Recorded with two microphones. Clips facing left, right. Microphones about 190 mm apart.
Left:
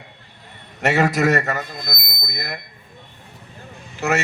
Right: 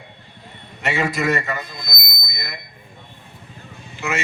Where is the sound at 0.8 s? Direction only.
65° left (ahead or behind).